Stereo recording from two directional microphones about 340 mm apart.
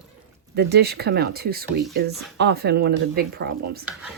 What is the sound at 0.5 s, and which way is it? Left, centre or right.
Speech, right.